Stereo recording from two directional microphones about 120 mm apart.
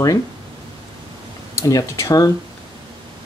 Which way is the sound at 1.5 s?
25° left (ahead or behind).